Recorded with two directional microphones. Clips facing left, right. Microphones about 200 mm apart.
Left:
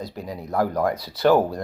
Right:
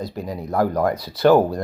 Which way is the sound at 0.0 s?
50° right (ahead or behind).